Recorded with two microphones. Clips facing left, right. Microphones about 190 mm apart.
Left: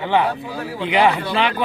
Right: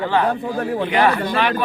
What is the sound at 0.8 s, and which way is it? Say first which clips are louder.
Speech: left 2 dB; 20° left (ahead or behind).